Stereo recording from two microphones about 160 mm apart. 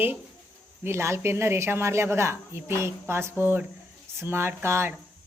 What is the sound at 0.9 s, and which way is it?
A woman's voice, 15° right (ahead or behind).